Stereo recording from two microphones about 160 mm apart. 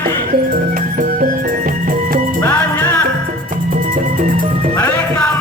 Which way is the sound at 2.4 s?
15° left (ahead or behind).